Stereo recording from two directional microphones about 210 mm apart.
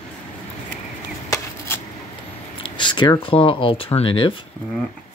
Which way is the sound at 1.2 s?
15° left (ahead or behind).